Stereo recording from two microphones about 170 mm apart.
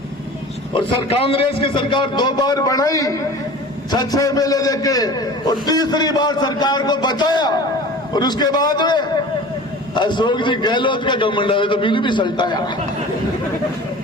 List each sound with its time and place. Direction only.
0.7 s a man's voice: 30° left (ahead or behind)